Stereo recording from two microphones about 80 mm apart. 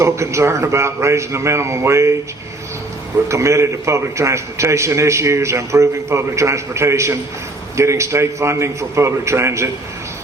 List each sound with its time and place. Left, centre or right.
0.0 s a man's voice: right
3.2 s a man's voice: right